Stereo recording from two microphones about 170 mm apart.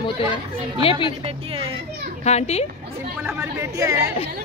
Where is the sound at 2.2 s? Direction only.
40° left (ahead or behind).